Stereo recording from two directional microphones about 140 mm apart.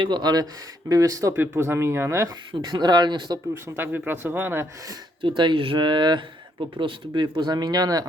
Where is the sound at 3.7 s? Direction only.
15° right (ahead or behind).